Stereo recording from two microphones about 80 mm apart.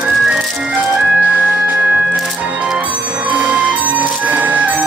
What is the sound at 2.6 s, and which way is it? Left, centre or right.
Music, centre.